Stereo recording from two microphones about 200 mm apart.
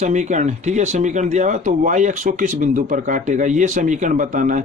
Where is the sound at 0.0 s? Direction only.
35° right (ahead or behind).